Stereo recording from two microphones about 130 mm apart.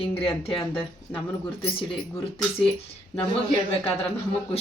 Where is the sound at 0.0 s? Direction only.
45° left (ahead or behind).